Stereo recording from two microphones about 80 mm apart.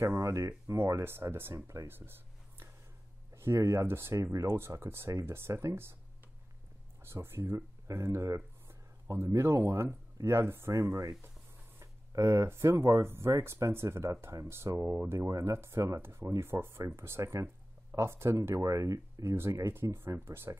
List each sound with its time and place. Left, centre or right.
0.0 s speech: right
7.0 s speech: right
10.7 s speech: right
19.3 s speech: right